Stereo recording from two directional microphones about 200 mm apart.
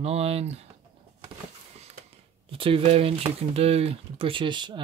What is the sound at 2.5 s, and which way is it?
Speech, 25° right (ahead or behind).